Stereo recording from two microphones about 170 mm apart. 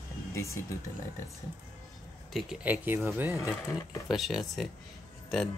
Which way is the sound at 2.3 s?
5° right (ahead or behind).